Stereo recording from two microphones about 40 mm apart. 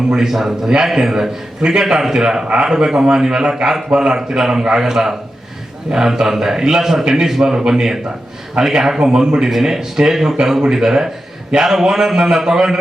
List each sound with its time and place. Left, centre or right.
0.1 s a man's voice: centre